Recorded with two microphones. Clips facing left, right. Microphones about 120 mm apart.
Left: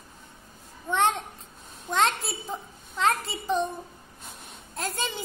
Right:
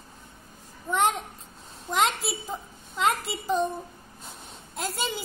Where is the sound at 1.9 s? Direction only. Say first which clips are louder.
Even; 5° right (ahead or behind).